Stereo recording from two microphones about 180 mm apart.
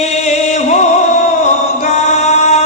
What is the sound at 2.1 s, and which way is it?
Music, 40° left (ahead or behind).